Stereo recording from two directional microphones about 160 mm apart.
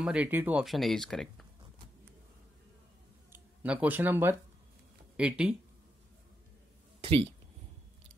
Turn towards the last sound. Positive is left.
turn(degrees=-40)  # may be behind; listen again after turning